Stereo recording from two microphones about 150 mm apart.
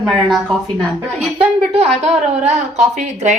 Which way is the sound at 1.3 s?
45° right (ahead or behind).